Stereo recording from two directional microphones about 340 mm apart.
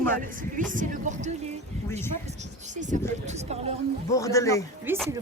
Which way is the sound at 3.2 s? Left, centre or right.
Centre.